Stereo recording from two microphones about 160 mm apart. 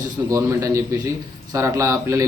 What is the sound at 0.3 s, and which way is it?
Speech, 20° right (ahead or behind).